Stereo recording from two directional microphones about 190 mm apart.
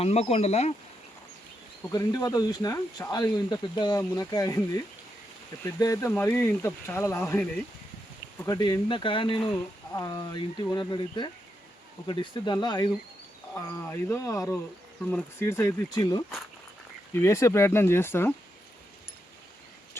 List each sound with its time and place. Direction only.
0.0 s speech: 35° left (ahead or behind)
1.9 s speech: 20° left (ahead or behind)
8.4 s speech: 20° left (ahead or behind)